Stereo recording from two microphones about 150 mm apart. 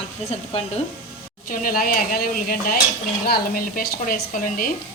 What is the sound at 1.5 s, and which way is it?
Speech, 70° left (ahead or behind).